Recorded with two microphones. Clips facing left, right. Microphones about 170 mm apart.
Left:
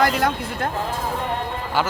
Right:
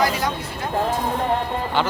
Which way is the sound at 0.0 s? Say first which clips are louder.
Left 2 dB; 55° left (ahead or behind).